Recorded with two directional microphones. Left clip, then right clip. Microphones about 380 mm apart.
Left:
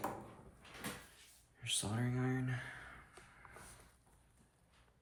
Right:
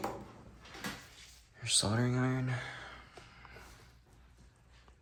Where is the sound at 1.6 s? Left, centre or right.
Centre.